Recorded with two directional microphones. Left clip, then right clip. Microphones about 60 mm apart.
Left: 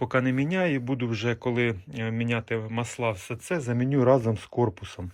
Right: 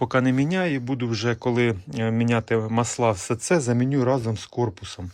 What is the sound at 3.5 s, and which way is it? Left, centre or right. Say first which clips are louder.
Speech: right 7 dB; right.